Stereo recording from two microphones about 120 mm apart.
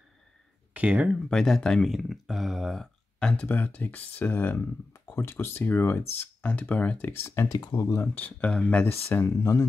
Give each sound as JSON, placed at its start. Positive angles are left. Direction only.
{"t": 0.7, "sound": "speech", "side_deg": -10}
{"t": 1.3, "sound": "speech", "side_deg": 5}
{"t": 8.1, "sound": "speech", "side_deg": 15}
{"t": 9.1, "sound": "speech", "side_deg": 20}